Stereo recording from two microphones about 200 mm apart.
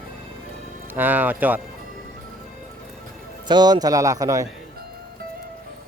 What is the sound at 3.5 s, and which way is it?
Speech, 20° right (ahead or behind).